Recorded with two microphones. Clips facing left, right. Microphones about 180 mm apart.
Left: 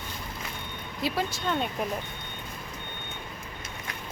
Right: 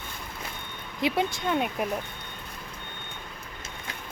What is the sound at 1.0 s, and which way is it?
Speech, 20° right (ahead or behind).